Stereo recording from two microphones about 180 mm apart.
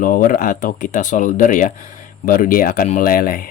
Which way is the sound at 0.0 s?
50° left (ahead or behind).